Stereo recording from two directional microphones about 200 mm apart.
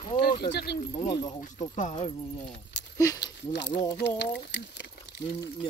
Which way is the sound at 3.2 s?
60° left (ahead or behind).